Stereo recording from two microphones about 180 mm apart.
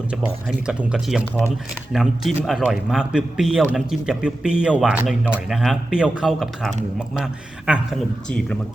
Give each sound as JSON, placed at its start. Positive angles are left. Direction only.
{"t": 0.1, "sound": "speech", "side_deg": -5}
{"t": 7.7, "sound": "speech", "side_deg": 0}